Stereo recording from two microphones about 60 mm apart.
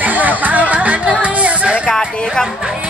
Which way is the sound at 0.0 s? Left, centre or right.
Right.